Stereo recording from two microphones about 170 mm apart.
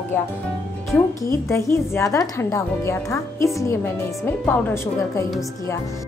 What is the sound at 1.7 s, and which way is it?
Speech, 15° left (ahead or behind).